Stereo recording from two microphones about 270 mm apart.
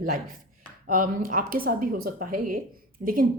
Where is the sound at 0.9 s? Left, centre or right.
Right.